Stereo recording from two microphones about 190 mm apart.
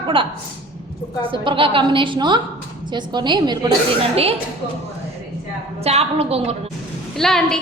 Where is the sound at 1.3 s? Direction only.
25° right (ahead or behind).